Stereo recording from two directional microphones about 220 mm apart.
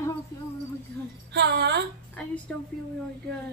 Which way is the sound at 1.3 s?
50° right (ahead or behind).